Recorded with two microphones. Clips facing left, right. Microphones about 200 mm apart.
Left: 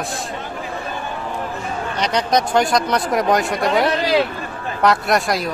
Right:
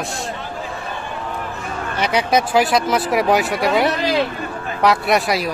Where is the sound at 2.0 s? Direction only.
5° right (ahead or behind).